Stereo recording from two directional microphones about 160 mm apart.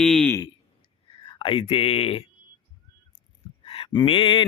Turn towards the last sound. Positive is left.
turn(degrees=30)  # may be behind; listen again after turning